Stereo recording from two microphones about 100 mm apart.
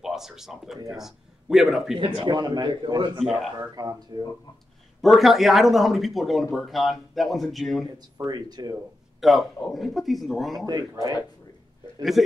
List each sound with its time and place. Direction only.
0.0 s speech: 5° right (ahead or behind)
2.2 s a man's voice: 45° right (ahead or behind)
3.2 s speech: centre (ahead or behind)
3.7 s speech: 40° right (ahead or behind)
5.0 s speech: centre (ahead or behind)
8.3 s a man's voice: 45° right (ahead or behind)
9.2 s speech: centre (ahead or behind)
10.7 s speech: 40° right (ahead or behind)